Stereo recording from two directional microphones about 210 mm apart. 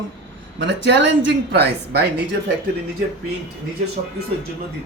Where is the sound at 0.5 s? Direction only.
55° right (ahead or behind).